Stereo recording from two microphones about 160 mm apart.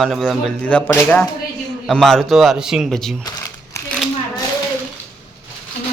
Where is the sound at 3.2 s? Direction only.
20° left (ahead or behind).